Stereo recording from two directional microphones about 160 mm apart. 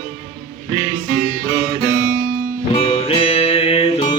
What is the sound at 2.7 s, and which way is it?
Music, 40° left (ahead or behind).